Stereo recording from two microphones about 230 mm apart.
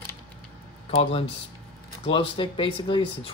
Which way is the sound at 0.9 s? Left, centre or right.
Left.